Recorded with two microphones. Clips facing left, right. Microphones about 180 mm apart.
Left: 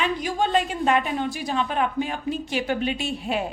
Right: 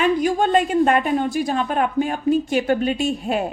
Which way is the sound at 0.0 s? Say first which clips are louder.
Right 6 dB; 50° right (ahead or behind).